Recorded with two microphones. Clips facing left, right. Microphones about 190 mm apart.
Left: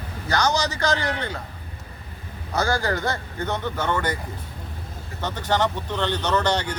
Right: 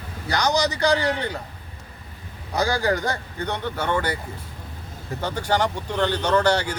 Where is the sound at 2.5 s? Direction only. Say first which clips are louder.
Right 1 dB; 15° right (ahead or behind).